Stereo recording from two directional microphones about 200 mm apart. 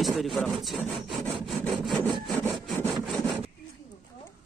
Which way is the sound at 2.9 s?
25° right (ahead or behind).